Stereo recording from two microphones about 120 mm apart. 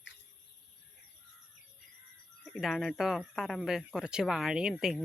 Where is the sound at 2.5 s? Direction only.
Centre (ahead or behind).